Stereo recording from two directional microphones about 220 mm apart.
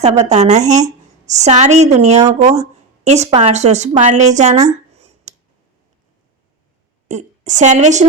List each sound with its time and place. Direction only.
0.0 s a woman's voice: 30° right (ahead or behind)
4.9 s a sound: 30° right (ahead or behind)
7.1 s a woman's voice: 35° right (ahead or behind)